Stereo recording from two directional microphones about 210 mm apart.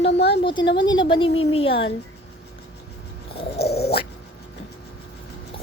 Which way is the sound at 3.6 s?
50° left (ahead or behind).